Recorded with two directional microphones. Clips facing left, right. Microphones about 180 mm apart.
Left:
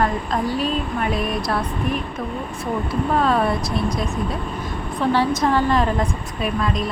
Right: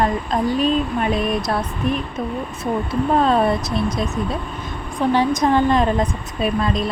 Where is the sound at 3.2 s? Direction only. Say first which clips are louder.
Right 2 dB; 25° right (ahead or behind).